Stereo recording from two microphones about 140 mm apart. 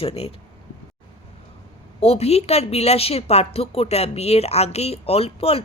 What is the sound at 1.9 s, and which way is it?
A woman's voice, 45° left (ahead or behind).